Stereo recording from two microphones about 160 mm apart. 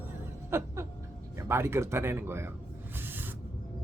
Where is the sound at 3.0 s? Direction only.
10° right (ahead or behind).